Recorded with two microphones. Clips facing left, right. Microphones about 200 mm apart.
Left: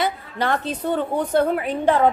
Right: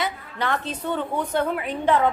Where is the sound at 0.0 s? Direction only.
35° left (ahead or behind).